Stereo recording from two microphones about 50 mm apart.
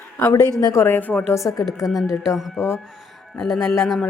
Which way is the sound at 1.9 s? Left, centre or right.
Centre.